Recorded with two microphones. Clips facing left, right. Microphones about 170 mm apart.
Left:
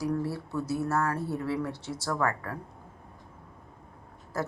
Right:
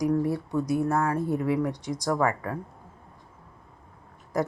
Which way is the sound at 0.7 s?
15° right (ahead or behind).